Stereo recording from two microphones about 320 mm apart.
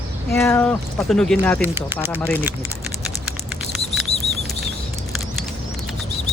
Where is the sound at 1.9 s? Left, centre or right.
Centre.